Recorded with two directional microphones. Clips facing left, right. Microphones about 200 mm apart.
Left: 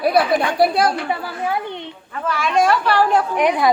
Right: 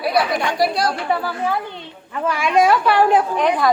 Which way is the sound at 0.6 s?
55° left (ahead or behind).